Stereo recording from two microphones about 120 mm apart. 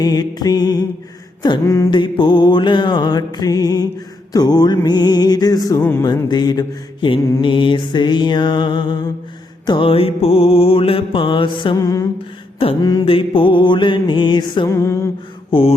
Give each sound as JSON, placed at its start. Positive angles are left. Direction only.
{"t": 0.0, "sound": "mantra", "side_deg": 35}
{"t": 1.6, "sound": "music", "side_deg": 25}
{"t": 1.9, "sound": "mantra", "side_deg": 40}
{"t": 11.8, "sound": "music", "side_deg": 30}
{"t": 12.8, "sound": "mantra", "side_deg": 35}
{"t": 13.1, "sound": "mantra", "side_deg": 50}
{"t": 14.7, "sound": "music", "side_deg": 25}
{"t": 15.4, "sound": "mantra", "side_deg": 50}